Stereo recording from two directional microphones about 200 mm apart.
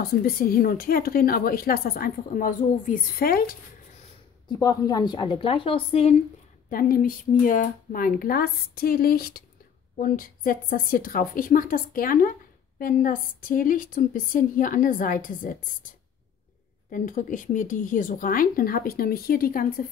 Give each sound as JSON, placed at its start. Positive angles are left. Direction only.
{"t": 0.0, "sound": "a woman's voice", "side_deg": 45}
{"t": 4.5, "sound": "a woman's voice", "side_deg": 20}
{"t": 6.7, "sound": "a woman's voice", "side_deg": 45}
{"t": 16.9, "sound": "a woman's voice", "side_deg": 40}